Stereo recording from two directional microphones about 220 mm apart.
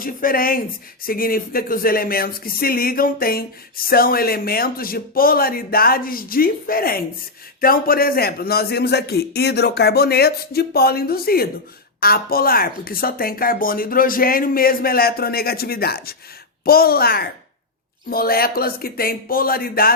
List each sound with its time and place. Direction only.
0.0 s speech: 40° left (ahead or behind)